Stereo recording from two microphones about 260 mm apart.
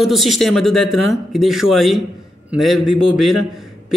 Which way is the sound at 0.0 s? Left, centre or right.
Centre.